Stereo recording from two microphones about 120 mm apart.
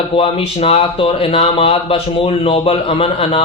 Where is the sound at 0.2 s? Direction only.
50° left (ahead or behind).